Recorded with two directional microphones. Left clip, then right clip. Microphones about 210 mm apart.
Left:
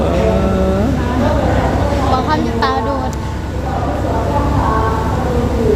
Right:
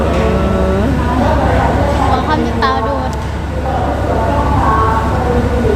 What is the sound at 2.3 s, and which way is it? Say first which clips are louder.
Music: right 1 dB; 25° left (ahead or behind).